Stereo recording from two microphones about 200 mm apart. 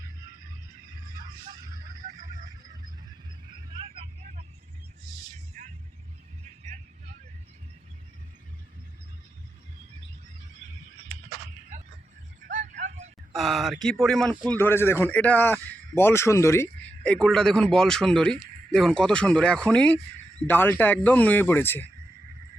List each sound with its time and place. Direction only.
2.1 s a sound: 40° right (ahead or behind)
3.7 s vehicle: 25° right (ahead or behind)
5.6 s vehicle: 40° right (ahead or behind)
12.5 s vehicle: 35° right (ahead or behind)
13.3 s a man's voice: centre (ahead or behind)